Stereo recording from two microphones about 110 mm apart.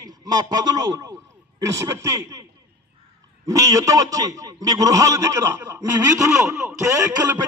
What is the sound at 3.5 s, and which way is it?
A man's voice, 30° right (ahead or behind).